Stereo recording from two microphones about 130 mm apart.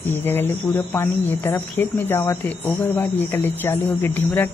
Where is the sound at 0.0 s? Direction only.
15° left (ahead or behind).